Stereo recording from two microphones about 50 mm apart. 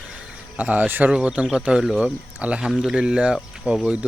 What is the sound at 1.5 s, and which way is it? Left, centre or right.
Speech, centre.